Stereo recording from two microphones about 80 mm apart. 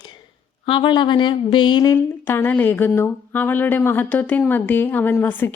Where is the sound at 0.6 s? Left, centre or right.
Left.